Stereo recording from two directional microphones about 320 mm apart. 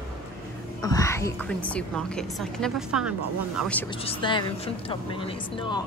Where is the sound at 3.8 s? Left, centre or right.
Centre.